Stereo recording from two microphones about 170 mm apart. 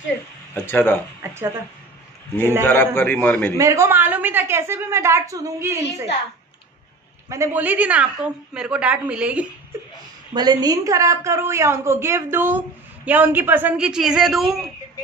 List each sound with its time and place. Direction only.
0.7 s a man's voice: 10° left (ahead or behind)
1.2 s a woman's voice: 15° right (ahead or behind)
2.6 s a man's voice: 10° left (ahead or behind)
3.5 s a woman's voice: 20° right (ahead or behind)
7.2 s a woman's voice: 15° right (ahead or behind)
10.3 s a woman's voice: 25° right (ahead or behind); by 14.6 s centre (ahead or behind)